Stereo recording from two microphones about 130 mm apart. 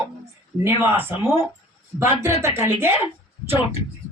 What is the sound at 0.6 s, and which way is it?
Speech, 15° right (ahead or behind).